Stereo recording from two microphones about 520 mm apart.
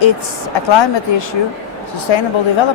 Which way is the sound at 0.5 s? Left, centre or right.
Left.